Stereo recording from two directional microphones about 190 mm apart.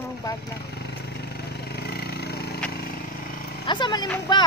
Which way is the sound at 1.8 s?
55° left (ahead or behind).